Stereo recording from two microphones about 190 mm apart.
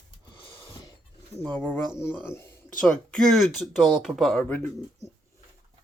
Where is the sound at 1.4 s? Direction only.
5° left (ahead or behind).